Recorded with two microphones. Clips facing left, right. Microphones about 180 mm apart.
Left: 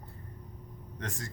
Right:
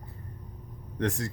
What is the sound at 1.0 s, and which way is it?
Speech, 70° right (ahead or behind).